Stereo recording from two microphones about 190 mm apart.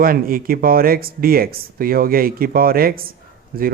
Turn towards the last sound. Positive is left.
turn(degrees=-50)  # may be behind; listen again after turning